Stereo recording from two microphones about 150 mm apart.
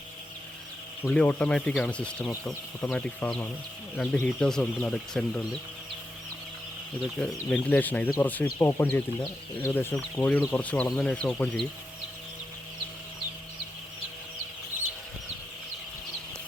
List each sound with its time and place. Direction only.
1.1 s speech: 10° left (ahead or behind)
7.0 s speech: 5° left (ahead or behind)